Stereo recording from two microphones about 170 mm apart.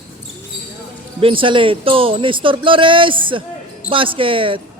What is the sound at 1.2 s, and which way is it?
Speech, 30° right (ahead or behind).